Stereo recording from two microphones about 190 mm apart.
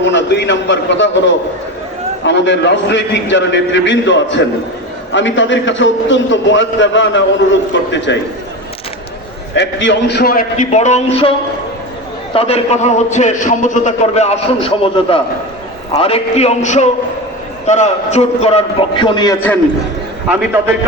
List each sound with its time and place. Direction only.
0.0 s a man's voice: 70° left (ahead or behind)
9.6 s a man's voice: 70° left (ahead or behind); by 19.4 s 20° left (ahead or behind)